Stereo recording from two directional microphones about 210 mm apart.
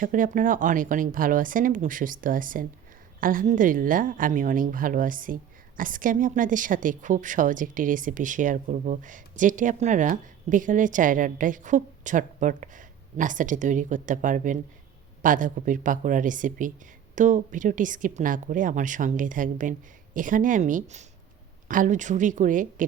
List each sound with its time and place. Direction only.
0.0 s a woman's voice: 40° right (ahead or behind)